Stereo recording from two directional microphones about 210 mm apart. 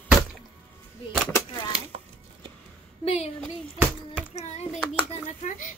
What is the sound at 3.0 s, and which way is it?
Speech, 30° left (ahead or behind).